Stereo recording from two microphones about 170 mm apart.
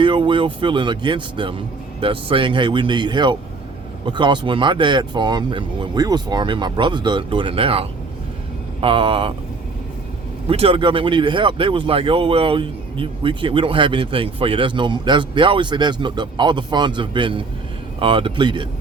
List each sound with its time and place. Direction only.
0.0 s speech: 30° right (ahead or behind)
10.4 s speech: 35° right (ahead or behind)